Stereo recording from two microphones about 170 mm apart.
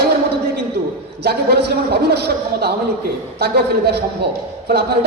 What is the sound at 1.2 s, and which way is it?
A man's voice, 70° right (ahead or behind).